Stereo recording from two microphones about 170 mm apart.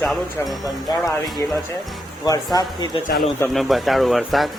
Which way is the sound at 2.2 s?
20° left (ahead or behind).